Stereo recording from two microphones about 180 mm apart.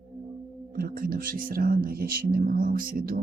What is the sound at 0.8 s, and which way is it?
Speech, 55° right (ahead or behind).